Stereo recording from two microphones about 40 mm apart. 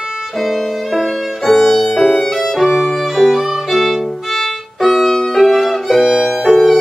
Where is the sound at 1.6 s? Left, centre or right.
Centre.